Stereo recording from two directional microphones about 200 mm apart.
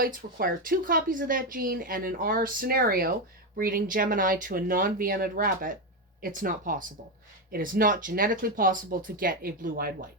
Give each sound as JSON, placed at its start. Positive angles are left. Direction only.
{"t": 0.0, "sound": "speech", "side_deg": -45}